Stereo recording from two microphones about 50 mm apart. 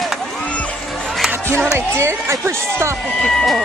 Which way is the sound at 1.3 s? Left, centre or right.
Right.